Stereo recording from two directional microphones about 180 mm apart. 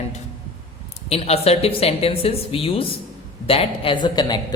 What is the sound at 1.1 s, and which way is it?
A woman's voice, 35° left (ahead or behind).